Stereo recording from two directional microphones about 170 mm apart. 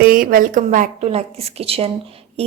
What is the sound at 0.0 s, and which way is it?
A woman's voice, 55° right (ahead or behind).